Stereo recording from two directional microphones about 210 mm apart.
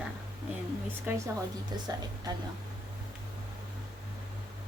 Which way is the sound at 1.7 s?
20° right (ahead or behind).